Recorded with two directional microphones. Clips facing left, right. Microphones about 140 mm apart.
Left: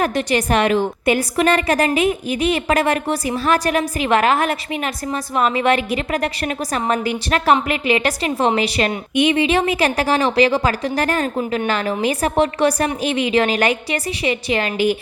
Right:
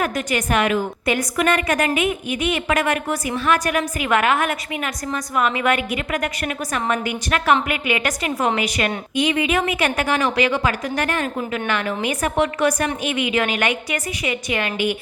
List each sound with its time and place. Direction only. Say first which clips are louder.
0.0 s a woman's voice: left 4 dB; 30° left (ahead or behind)